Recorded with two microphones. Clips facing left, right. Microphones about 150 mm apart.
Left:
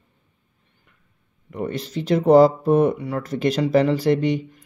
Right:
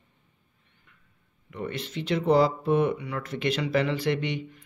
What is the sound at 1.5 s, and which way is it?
Speech, 40° left (ahead or behind).